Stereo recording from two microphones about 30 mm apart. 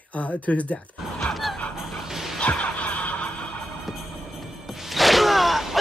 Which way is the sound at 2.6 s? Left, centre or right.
Left.